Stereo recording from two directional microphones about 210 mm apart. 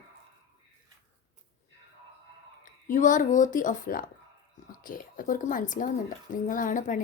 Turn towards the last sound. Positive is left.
turn(degrees=40)  # may be behind; listen again after turning